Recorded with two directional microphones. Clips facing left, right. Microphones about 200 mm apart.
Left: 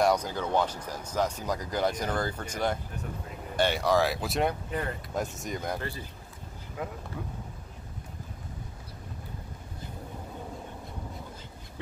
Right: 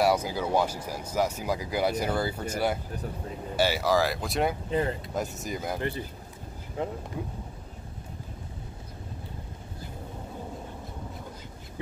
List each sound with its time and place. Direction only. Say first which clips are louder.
0.0 s speech: right 1 dB; 5° right (ahead or behind)
4.6 s speech: right 6 dB; 25° right (ahead or behind)
5.1 s speech: right 1 dB; centre (ahead or behind)
5.8 s speech: right 5 dB; 20° right (ahead or behind)